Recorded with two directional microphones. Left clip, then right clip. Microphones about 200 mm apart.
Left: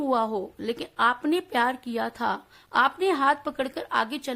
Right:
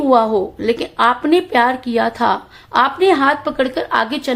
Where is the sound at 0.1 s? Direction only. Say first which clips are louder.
Right 14 dB; 40° left (ahead or behind).